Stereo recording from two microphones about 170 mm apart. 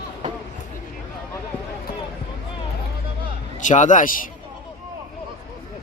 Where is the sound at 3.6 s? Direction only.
45° left (ahead or behind).